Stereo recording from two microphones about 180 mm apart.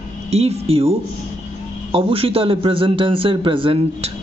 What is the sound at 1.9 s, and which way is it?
A man's voice, 30° right (ahead or behind).